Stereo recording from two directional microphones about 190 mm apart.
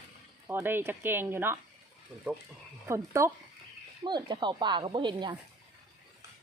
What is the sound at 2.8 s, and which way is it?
Speech, 15° right (ahead or behind).